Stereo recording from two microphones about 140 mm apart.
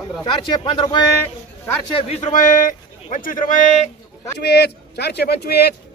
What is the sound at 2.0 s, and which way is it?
A man's voice, 50° left (ahead or behind).